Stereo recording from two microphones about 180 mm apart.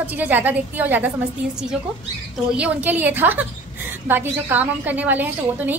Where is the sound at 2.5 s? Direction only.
10° right (ahead or behind).